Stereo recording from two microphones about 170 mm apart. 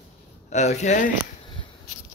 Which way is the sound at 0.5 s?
45° left (ahead or behind).